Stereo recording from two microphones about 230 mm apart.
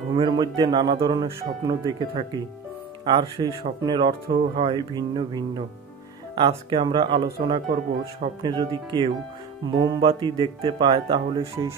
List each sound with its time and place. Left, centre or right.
0.1 s speech: centre